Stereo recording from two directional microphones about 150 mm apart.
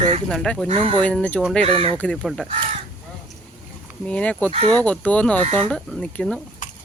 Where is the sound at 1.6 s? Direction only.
40° right (ahead or behind).